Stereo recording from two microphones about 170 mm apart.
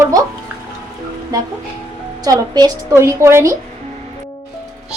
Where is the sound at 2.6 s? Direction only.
20° right (ahead or behind).